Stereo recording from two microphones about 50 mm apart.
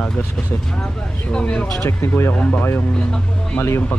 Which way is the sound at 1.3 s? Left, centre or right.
Left.